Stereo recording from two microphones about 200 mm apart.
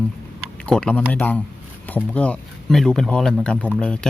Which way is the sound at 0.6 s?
5° left (ahead or behind).